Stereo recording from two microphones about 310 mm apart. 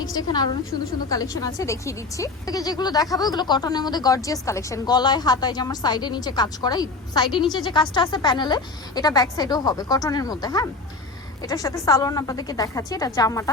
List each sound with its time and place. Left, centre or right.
0.0 s speech: centre